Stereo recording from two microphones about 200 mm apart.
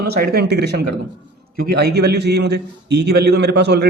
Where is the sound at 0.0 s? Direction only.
50° right (ahead or behind).